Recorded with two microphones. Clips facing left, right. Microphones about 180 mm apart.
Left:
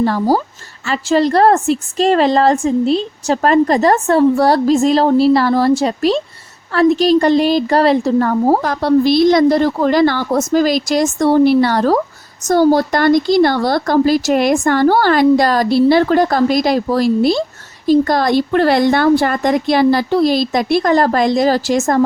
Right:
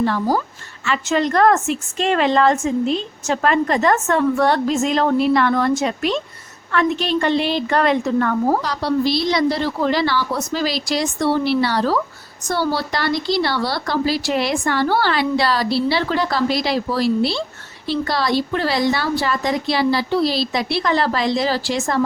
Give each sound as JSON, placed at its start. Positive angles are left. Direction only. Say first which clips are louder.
{"t": 0.0, "sound": "a woman's voice", "louder": "left 5 dB", "side_deg": 35}
{"t": 8.6, "sound": "speech", "louder": "left 7 dB", "side_deg": 50}